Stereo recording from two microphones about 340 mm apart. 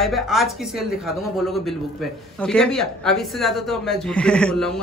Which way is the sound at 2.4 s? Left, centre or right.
Centre.